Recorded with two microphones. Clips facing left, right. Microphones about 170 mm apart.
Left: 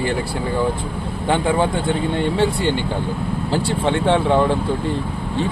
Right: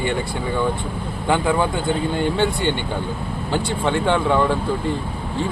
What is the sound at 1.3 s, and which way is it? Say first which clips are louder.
Speech: left 1 dB; 30° left (ahead or behind).